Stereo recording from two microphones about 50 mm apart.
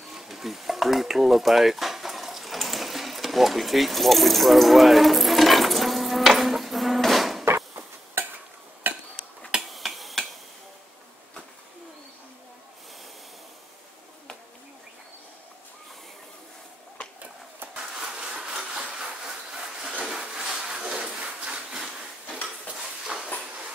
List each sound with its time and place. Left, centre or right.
0.0 s stir: centre
7.4 s a sound: right
8.8 s dishes: right
9.6 s finger snapping: centre
17.7 s a sound: centre
22.7 s dishes: centre